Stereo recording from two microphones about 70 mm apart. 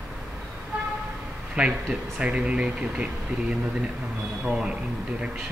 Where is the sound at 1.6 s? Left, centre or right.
Centre.